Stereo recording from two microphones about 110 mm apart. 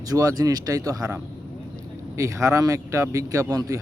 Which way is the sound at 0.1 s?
30° right (ahead or behind).